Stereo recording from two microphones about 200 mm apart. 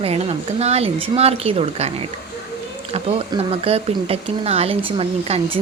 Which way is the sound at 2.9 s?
30° right (ahead or behind).